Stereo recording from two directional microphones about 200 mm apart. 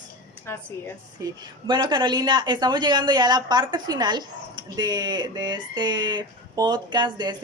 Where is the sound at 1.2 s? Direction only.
20° right (ahead or behind).